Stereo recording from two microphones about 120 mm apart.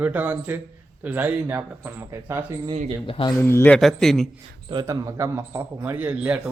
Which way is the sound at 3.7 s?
5° left (ahead or behind).